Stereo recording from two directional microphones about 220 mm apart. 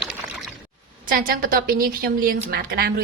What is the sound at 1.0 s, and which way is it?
A woman's voice, 40° right (ahead or behind).